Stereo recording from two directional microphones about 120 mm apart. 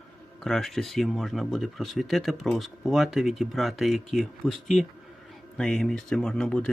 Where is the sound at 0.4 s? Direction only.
Centre (ahead or behind).